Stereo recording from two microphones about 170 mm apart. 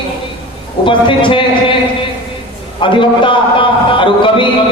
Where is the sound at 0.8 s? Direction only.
30° left (ahead or behind).